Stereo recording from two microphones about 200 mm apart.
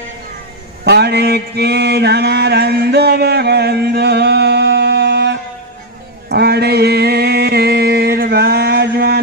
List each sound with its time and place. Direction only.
0.8 s mantra: 55° right (ahead or behind)
6.2 s music: 55° right (ahead or behind)